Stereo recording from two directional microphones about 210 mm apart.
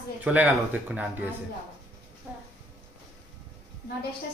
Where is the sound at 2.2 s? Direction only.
10° right (ahead or behind).